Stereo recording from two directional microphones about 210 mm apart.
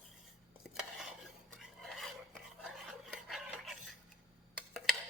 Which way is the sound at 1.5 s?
Centre (ahead or behind).